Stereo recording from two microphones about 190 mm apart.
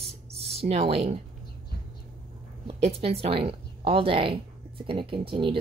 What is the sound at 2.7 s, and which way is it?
A woman's voice, 30° right (ahead or behind).